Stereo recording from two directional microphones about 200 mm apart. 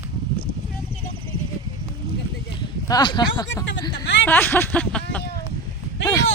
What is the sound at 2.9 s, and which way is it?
Speech, 20° left (ahead or behind).